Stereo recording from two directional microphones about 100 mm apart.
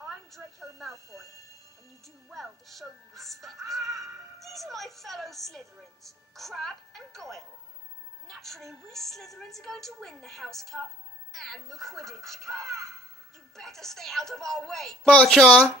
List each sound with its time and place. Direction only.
0.8 s speech: 30° right (ahead or behind)
2.3 s a woman's voice: centre (ahead or behind)
3.8 s music: 35° right (ahead or behind)
4.4 s a woman's voice: centre (ahead or behind)
12.5 s speech: 30° right (ahead or behind)
13.6 s a woman's voice: 5° left (ahead or behind)